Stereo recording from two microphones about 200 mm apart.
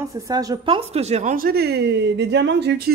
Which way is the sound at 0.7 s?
30° right (ahead or behind).